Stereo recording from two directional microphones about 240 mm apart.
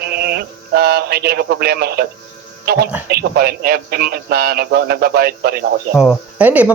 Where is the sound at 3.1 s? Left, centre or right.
Right.